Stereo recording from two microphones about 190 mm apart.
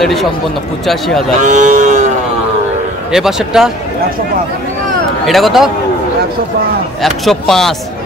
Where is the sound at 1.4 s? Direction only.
40° right (ahead or behind).